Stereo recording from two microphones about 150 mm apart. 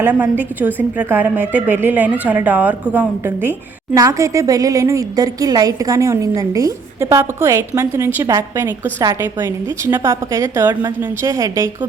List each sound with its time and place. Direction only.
0.0 s a woman's voice: 10° right (ahead or behind)